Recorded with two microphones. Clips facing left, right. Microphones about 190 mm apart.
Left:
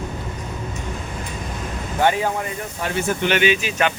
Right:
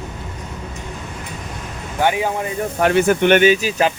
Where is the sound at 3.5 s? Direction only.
35° right (ahead or behind).